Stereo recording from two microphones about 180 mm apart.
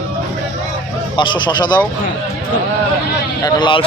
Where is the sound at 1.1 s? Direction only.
25° left (ahead or behind).